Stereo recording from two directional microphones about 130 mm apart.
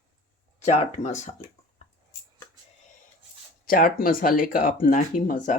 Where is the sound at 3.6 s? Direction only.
90° left.